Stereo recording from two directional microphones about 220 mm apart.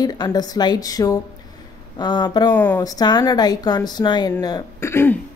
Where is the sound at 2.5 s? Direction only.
10° left (ahead or behind).